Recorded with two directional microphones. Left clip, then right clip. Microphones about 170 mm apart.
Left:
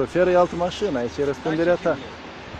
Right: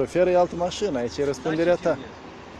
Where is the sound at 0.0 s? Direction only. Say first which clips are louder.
Left 2 dB; 5° left (ahead or behind).